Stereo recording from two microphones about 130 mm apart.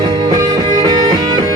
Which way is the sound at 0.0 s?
30° right (ahead or behind).